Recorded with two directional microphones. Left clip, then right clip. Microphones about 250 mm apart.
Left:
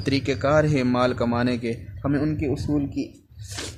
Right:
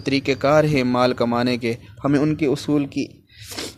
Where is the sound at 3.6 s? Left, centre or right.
Right.